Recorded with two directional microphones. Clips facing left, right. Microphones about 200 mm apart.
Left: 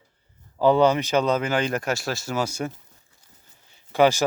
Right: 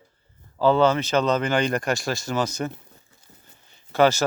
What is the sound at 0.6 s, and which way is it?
Speech, 15° left (ahead or behind).